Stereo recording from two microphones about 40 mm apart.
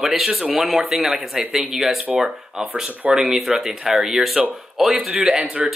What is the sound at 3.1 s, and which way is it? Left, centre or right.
Speech, centre.